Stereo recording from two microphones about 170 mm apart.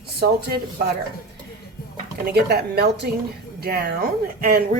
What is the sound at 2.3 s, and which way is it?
A woman's voice, 65° right (ahead or behind).